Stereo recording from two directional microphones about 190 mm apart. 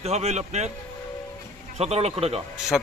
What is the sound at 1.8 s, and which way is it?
Speech, 35° right (ahead or behind).